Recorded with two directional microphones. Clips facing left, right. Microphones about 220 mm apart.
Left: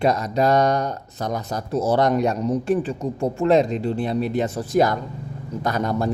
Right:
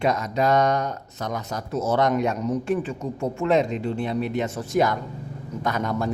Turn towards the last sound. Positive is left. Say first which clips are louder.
# left 3 dB
turn(degrees=35)  # may be behind; listen again after turning